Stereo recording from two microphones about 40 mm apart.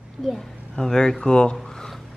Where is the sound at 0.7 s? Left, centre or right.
Centre.